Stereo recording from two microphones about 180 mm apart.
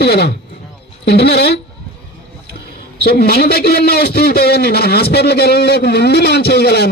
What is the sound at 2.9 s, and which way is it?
A man's voice, 60° left (ahead or behind).